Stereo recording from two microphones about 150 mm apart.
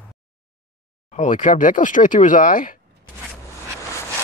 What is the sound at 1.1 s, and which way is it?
Speech, 60° left (ahead or behind).